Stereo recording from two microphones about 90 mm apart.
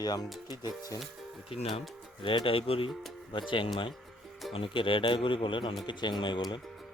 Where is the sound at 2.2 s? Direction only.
75° left (ahead or behind); by 2.9 s 90° left.